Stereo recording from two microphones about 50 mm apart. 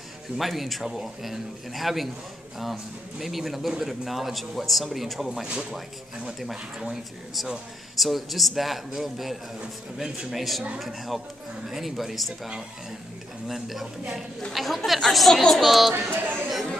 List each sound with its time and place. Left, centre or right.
0.4 s a man's voice: centre
13.5 s a man's voice: centre
15.9 s speech: right